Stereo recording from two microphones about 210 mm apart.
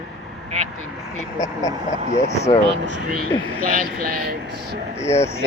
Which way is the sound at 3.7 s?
45° right (ahead or behind).